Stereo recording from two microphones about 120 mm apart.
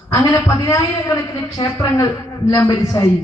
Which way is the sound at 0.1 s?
25° left (ahead or behind).